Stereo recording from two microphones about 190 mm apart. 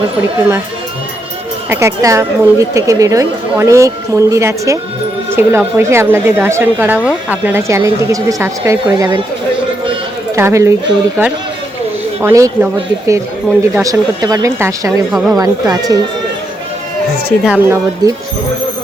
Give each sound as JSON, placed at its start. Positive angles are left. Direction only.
{"t": 0.2, "sound": "a woman's voice", "side_deg": -10}
{"t": 1.7, "sound": "a woman's voice", "side_deg": -15}
{"t": 10.3, "sound": "a woman's voice", "side_deg": -15}
{"t": 13.8, "sound": "a woman's voice", "side_deg": -20}
{"t": 17.4, "sound": "a woman's voice", "side_deg": -10}
{"t": 18.0, "sound": "speech", "side_deg": -20}